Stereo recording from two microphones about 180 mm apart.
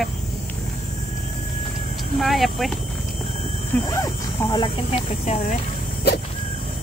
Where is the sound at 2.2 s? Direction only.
Centre (ahead or behind).